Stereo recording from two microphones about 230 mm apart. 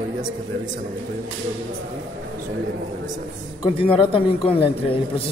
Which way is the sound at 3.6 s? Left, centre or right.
Left.